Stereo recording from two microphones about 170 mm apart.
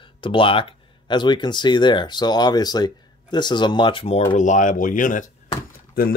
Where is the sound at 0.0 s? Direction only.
30° left (ahead or behind).